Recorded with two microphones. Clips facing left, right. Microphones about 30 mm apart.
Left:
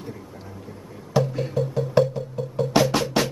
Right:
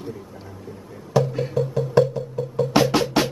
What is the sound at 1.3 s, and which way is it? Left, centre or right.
Music, centre.